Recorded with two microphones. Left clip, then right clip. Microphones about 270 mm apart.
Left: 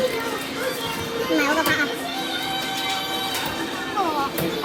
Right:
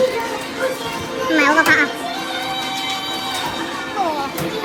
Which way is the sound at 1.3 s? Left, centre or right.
Right.